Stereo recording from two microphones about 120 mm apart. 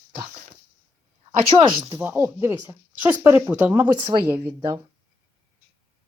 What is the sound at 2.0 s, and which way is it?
Speech, 20° right (ahead or behind).